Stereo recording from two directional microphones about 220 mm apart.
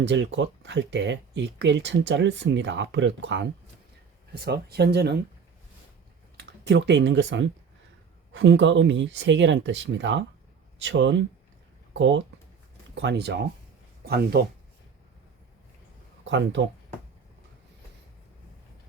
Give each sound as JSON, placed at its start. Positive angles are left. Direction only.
{"t": 0.0, "sound": "speech", "side_deg": -55}
{"t": 6.3, "sound": "speech", "side_deg": -50}
{"t": 16.3, "sound": "speech", "side_deg": -55}